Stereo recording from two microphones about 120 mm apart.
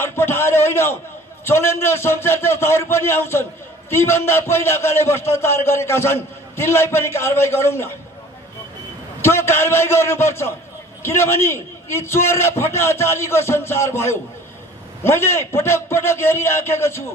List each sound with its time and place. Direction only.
0.0 s a man's voice: 20° left (ahead or behind)
9.2 s a man's voice: 20° left (ahead or behind)